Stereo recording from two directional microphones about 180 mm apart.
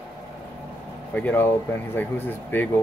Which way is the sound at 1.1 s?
10° left (ahead or behind).